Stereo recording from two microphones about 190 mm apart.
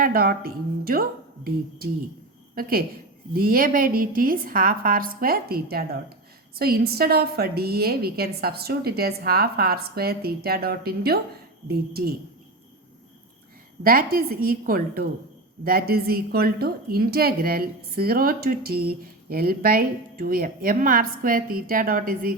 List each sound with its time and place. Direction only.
0.0 s a woman's voice: 50° right (ahead or behind)
2.6 s a woman's voice: 50° right (ahead or behind)
13.8 s a woman's voice: 50° right (ahead or behind)